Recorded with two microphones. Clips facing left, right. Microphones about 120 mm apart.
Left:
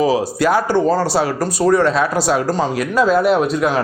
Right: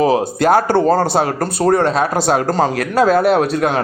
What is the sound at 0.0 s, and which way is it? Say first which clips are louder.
A man's voice: right 2 dB; 55° right (ahead or behind).